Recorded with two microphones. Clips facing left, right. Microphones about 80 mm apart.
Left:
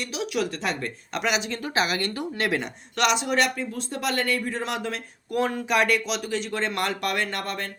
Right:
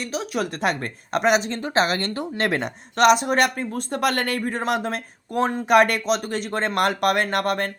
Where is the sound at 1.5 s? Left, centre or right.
Right.